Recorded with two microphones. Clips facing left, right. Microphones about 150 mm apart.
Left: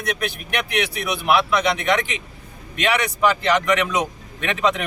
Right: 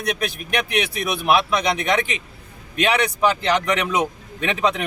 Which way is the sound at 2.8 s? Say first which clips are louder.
Right 1 dB; 30° right (ahead or behind).